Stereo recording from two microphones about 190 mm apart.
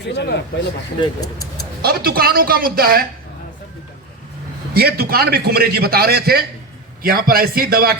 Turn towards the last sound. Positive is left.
turn(degrees=-50)  # may be behind; listen again after turning